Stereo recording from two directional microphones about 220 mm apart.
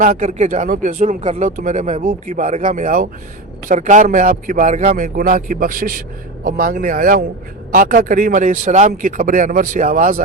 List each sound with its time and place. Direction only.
0.0 s a man's voice: 35° right (ahead or behind)